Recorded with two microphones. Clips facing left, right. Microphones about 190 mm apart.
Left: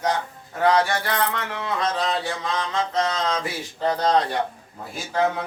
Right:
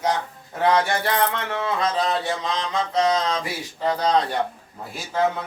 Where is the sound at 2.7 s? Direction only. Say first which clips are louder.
Right 4 dB; 15° right (ahead or behind).